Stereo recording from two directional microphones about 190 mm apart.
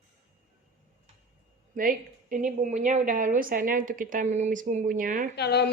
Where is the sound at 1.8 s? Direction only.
45° right (ahead or behind).